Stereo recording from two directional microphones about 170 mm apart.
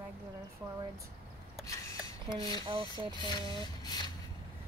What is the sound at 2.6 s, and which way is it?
Speech, 30° right (ahead or behind).